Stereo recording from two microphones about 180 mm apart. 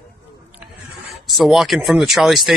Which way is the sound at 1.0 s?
Centre (ahead or behind).